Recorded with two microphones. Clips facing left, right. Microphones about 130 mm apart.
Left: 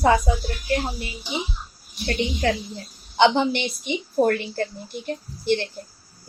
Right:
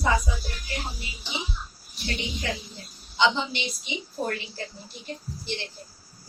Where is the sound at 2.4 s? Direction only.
50° left (ahead or behind).